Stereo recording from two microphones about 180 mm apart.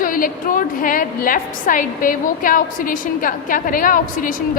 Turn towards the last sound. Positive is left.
turn(degrees=50)  # may be behind; listen again after turning